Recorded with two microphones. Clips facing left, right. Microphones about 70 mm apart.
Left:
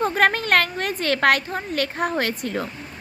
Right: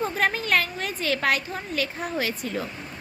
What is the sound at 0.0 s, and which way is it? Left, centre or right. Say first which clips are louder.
A woman's voice: left 5 dB; left.